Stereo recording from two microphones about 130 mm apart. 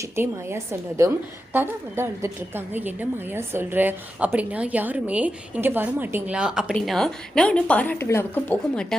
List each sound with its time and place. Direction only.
0.0 s a woman's voice: 20° right (ahead or behind); by 9.0 s 10° left (ahead or behind)